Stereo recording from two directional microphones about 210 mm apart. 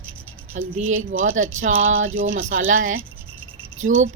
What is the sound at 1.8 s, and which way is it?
Speech, 70° right (ahead or behind).